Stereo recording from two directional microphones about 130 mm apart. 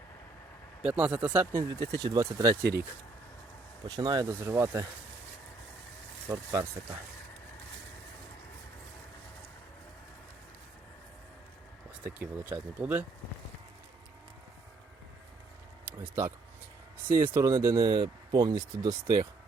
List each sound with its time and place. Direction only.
0.8 s speech: 10° right (ahead or behind)
1.7 s speech: 30° right (ahead or behind)
3.8 s speech: 30° right (ahead or behind)
6.2 s speech: 25° right (ahead or behind)
12.0 s speech: 15° right (ahead or behind)
15.9 s speech: 20° right (ahead or behind)